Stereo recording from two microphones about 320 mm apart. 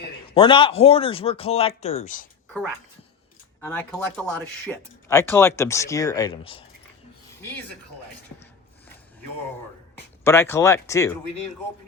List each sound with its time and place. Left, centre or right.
0.3 s speech: centre
3.6 s speech: centre
10.2 s speech: centre